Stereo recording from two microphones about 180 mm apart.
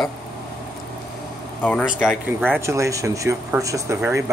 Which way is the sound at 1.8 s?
5° right (ahead or behind).